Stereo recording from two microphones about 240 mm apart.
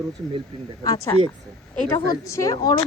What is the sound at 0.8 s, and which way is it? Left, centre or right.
Speech, centre.